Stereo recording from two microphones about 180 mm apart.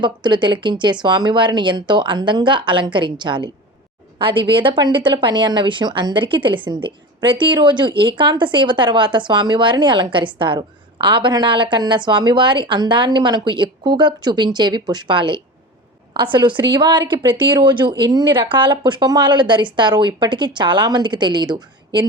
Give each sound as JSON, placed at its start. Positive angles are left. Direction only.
{"t": 0.0, "sound": "a woman's voice", "side_deg": -25}